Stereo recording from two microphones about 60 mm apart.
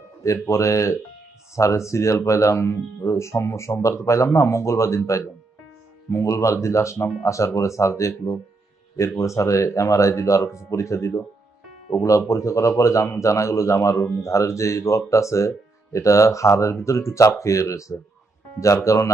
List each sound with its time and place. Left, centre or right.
0.4 s speech: left
13.9 s speech: left
14.2 s speech: left